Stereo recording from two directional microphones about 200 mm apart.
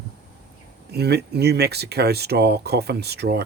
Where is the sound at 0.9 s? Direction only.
55° right (ahead or behind).